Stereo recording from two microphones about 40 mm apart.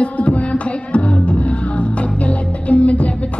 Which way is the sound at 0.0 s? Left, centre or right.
Left.